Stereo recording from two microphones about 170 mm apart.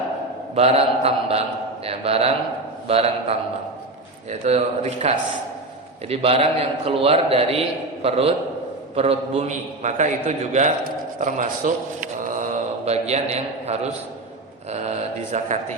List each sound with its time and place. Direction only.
0.5 s a man's voice: 35° right (ahead or behind)
9.0 s a man's voice: 35° right (ahead or behind)
14.7 s a sound: 40° right (ahead or behind)